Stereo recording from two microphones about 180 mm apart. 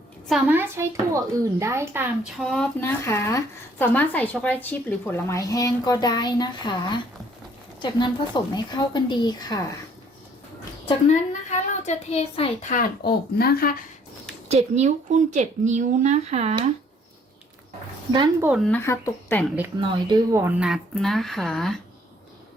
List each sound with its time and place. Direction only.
0.3 s speech: 5° right (ahead or behind)
2.4 s speech: centre (ahead or behind)
2.8 s a woman's voice: 15° left (ahead or behind)
11.1 s a child's voice: 40° left (ahead or behind)
14.4 s speech: 40° right (ahead or behind)
18.1 s speech: 25° right (ahead or behind)
18.7 s speech: 15° left (ahead or behind)
19.9 s speech: 25° right (ahead or behind)
20.4 s speech: 5° right (ahead or behind)